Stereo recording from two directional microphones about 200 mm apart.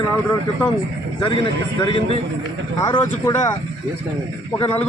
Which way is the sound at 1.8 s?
25° left (ahead or behind).